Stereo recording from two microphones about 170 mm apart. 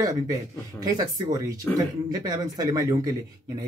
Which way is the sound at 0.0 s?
20° right (ahead or behind).